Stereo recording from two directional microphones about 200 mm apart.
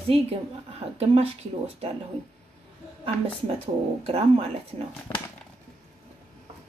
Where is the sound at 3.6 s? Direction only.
30° right (ahead or behind).